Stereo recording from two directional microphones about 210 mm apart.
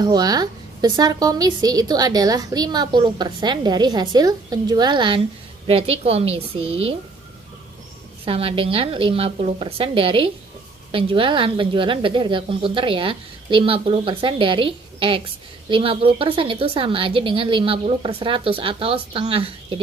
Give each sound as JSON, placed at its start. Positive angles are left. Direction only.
{"t": 0.0, "sound": "a woman's voice", "side_deg": -20}
{"t": 8.3, "sound": "a woman's voice", "side_deg": -25}